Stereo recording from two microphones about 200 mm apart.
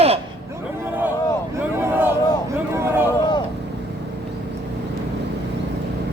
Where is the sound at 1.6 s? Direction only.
10° right (ahead or behind).